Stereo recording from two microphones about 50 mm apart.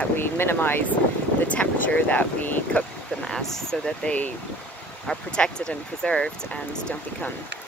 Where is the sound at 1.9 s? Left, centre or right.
Left.